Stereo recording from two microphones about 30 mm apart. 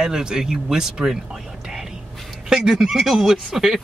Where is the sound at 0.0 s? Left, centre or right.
Right.